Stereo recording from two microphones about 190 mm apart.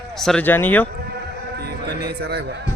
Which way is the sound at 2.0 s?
60° right (ahead or behind).